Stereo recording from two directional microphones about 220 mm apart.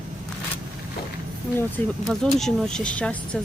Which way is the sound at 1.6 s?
5° left (ahead or behind).